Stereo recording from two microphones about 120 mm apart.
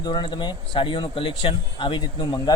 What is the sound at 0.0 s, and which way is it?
A man's voice, 35° left (ahead or behind).